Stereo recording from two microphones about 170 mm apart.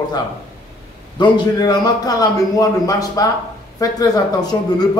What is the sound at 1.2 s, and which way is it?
A man's voice, 25° left (ahead or behind).